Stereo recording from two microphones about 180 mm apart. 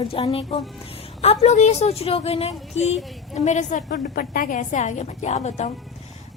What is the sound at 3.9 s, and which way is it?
A woman's voice, 60° left (ahead or behind).